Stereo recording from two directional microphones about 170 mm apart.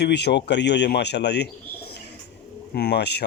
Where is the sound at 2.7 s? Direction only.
75° left (ahead or behind).